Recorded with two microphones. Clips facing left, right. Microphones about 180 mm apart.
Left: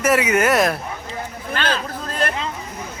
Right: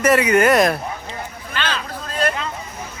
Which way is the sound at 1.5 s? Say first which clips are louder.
Left 3 dB; 45° left (ahead or behind).